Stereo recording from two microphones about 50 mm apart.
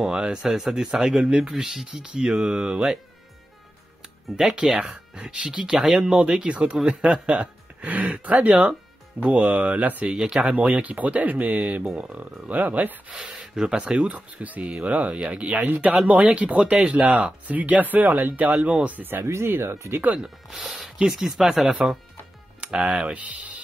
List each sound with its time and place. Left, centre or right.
0.0 s speech: centre
4.5 s speech: right
7.8 s speech: right
13.3 s a sound: centre
13.8 s speech: right
16.7 s speech: centre
17.0 s speech: right
19.2 s speech: right
21.0 s speech: centre
22.6 s speech: right